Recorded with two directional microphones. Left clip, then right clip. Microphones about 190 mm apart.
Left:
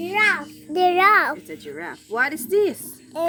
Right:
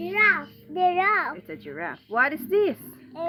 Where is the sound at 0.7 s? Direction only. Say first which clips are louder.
Left 6 dB; 75° left (ahead or behind).